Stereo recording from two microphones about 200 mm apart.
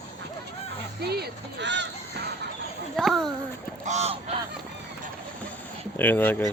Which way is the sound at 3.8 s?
35° right (ahead or behind).